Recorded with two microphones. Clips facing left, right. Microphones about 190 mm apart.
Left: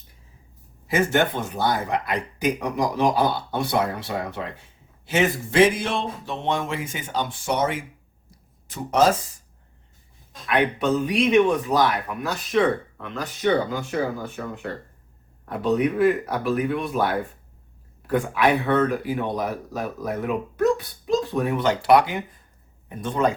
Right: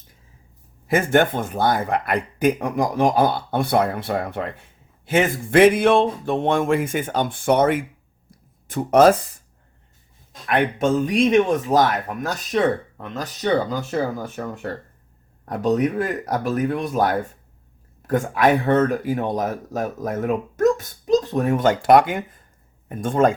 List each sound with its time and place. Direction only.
0.9 s speech: 50° right (ahead or behind)
10.4 s speech: 45° right (ahead or behind)